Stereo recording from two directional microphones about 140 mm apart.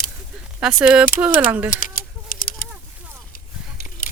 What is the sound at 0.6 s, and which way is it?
Speech, 5° right (ahead or behind).